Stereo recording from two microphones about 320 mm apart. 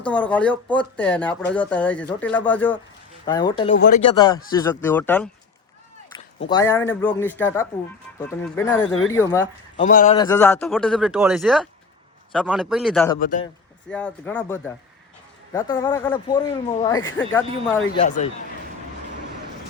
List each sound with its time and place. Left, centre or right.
0.0 s a man's voice: centre
3.8 s speech: left
4.1 s a man's voice: centre
6.5 s a man's voice: centre
9.7 s speech: left
10.2 s speech: centre
13.1 s speech: left
13.9 s a man's voice: centre
18.0 s speech: left